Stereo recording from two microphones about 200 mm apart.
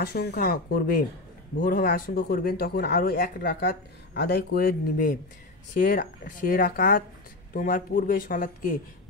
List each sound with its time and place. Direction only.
0.0 s speech: 55° left (ahead or behind)